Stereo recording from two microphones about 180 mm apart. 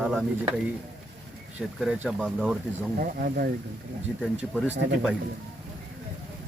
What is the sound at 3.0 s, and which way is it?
Speech, 55° right (ahead or behind).